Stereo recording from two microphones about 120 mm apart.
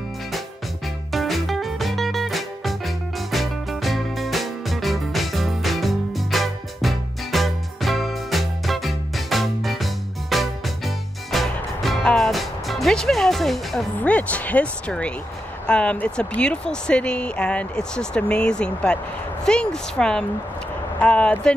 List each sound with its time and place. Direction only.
1.1 s music: centre (ahead or behind)
13.9 s speech: 10° left (ahead or behind)